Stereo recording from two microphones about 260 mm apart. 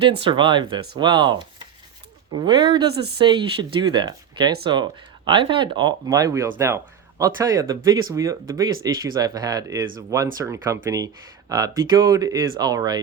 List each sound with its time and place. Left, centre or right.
0.3 s speech: centre